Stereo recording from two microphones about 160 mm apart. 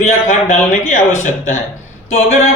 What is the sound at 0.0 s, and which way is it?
A man's voice, 50° left (ahead or behind).